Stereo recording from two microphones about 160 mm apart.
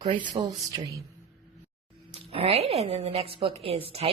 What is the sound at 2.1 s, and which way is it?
A woman's voice, 40° right (ahead or behind).